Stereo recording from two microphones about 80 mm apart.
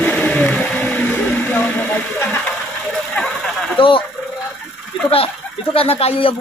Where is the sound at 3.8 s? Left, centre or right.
Left.